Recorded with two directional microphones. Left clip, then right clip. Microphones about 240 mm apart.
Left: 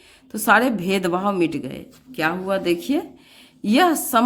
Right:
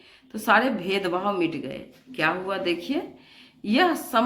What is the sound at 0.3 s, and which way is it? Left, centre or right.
A woman's voice, left.